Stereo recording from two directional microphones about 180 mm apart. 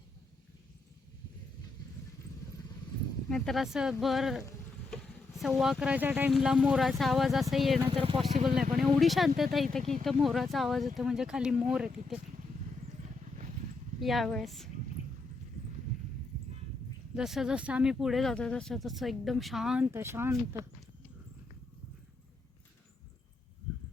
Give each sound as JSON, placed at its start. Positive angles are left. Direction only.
{"t": 3.2, "sound": "speech", "side_deg": 5}
{"t": 7.9, "sound": "speech", "side_deg": -30}
{"t": 8.5, "sound": "speech", "side_deg": 0}
{"t": 14.0, "sound": "speech", "side_deg": 0}
{"t": 17.2, "sound": "speech", "side_deg": 0}